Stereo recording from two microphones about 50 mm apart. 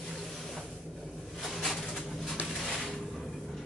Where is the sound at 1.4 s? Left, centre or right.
Centre.